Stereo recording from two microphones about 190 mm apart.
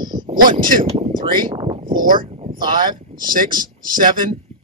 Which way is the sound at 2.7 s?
20° right (ahead or behind).